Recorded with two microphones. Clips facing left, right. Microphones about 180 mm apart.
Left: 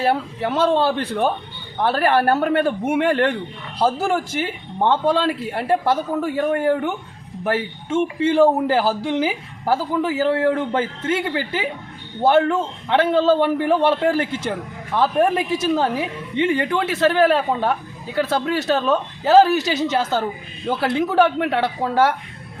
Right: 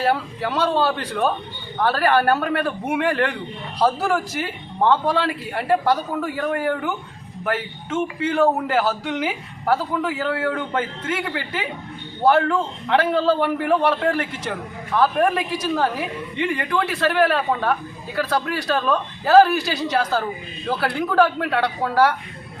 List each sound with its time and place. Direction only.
0.0 s a woman's voice: 25° left (ahead or behind)